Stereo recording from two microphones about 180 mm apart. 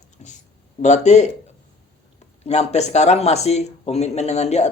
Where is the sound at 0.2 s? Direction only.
40° left (ahead or behind).